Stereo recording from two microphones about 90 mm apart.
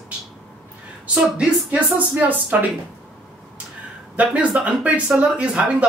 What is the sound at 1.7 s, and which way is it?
Speech, 15° right (ahead or behind).